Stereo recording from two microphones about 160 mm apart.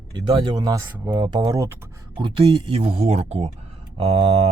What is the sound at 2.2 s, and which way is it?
Speech, 30° right (ahead or behind).